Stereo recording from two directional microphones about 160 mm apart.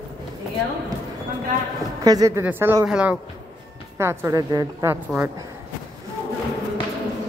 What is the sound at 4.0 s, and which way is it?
A woman's voice, 15° right (ahead or behind).